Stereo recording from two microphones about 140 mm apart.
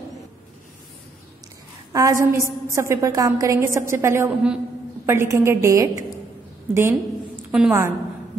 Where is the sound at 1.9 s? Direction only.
25° right (ahead or behind).